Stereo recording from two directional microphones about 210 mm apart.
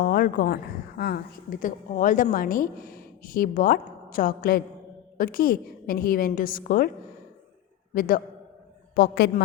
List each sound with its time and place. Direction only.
0.0 s a woman's voice: 45° left (ahead or behind)
7.9 s a woman's voice: 45° left (ahead or behind)